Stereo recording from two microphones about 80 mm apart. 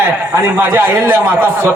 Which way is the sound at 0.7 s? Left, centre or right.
Right.